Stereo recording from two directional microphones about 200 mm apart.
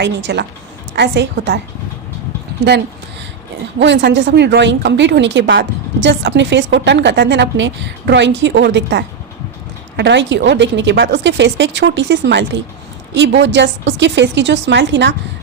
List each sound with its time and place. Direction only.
0.0 s a woman's voice: 60° right (ahead or behind)
3.8 s a woman's voice: 60° right (ahead or behind)